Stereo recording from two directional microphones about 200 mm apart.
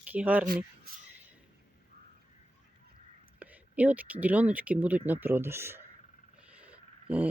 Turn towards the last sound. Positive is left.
turn(degrees=-5)  # may be behind; listen again after turning